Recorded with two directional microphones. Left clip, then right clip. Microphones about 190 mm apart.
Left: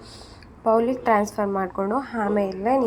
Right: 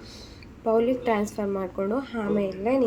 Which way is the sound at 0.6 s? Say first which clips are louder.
Left 3 dB; 20° left (ahead or behind).